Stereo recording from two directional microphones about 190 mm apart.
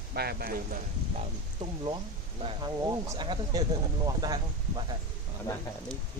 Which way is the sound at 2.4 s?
30° right (ahead or behind).